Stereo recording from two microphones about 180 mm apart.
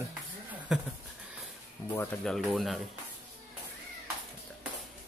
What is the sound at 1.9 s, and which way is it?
Speech, 10° left (ahead or behind).